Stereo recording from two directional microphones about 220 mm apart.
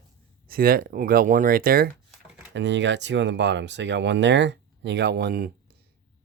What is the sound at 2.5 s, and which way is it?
Speech, 55° right (ahead or behind).